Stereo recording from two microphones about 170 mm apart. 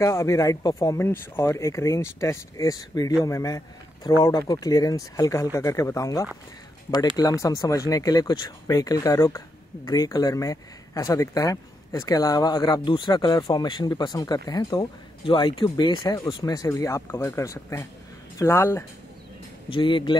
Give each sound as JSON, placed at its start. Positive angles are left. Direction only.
{"t": 0.0, "sound": "speech", "side_deg": 20}
{"t": 19.7, "sound": "speech", "side_deg": 30}